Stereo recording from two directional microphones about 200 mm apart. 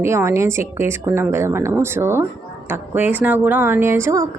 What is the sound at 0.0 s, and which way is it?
Speech, 15° right (ahead or behind).